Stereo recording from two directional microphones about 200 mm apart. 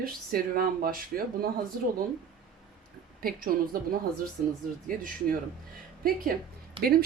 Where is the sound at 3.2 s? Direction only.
45° right (ahead or behind).